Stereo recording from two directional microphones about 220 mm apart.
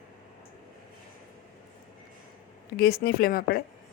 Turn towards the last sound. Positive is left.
turn(degrees=45)  # may be behind; listen again after turning